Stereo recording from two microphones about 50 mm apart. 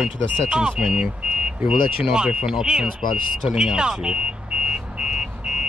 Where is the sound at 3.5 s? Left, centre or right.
Centre.